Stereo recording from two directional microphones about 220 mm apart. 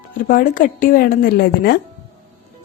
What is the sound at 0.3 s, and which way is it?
A woman's voice, 40° left (ahead or behind).